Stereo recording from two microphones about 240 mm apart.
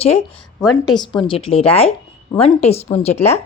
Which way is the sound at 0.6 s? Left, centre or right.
Centre.